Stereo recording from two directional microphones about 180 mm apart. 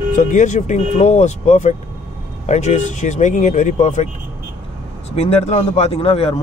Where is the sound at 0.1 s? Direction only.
45° left (ahead or behind).